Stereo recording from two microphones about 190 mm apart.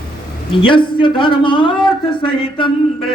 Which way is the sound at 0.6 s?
25° left (ahead or behind).